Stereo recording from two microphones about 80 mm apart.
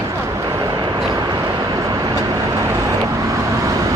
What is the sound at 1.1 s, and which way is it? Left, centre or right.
Vehicle, right.